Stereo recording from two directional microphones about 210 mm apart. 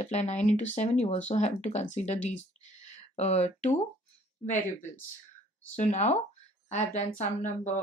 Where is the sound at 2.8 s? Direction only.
30° left (ahead or behind).